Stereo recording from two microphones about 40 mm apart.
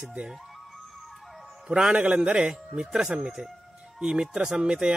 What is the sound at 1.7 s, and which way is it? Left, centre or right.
Speech, right.